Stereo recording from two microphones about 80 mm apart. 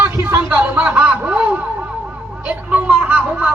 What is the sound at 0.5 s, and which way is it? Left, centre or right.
A man's voice, centre.